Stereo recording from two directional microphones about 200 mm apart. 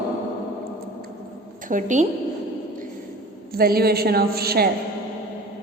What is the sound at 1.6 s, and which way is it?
Speech, 40° right (ahead or behind).